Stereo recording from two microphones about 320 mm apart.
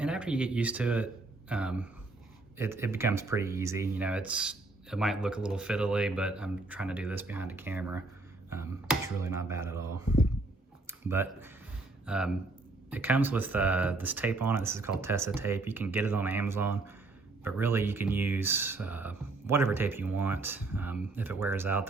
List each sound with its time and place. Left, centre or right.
0.0 s speech: centre